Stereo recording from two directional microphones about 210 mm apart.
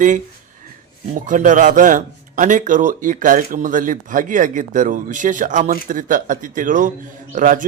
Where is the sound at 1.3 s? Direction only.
35° right (ahead or behind).